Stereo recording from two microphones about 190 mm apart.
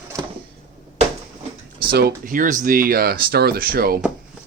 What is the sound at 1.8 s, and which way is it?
Speech, 55° right (ahead or behind).